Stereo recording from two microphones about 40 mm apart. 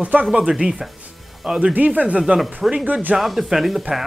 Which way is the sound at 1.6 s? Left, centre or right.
Right.